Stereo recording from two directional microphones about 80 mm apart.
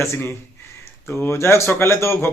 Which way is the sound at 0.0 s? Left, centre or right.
Left.